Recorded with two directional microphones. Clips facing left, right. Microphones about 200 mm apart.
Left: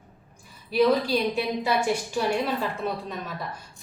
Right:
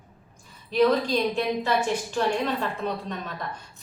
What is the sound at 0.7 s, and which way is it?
A woman's voice, 10° left (ahead or behind).